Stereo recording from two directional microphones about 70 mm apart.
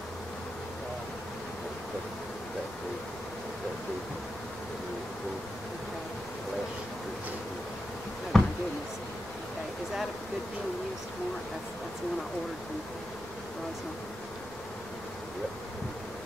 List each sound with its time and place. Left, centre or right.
8.3 s basketball bounce: centre